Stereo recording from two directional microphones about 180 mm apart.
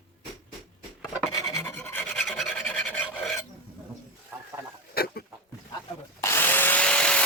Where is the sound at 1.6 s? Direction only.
10° left (ahead or behind).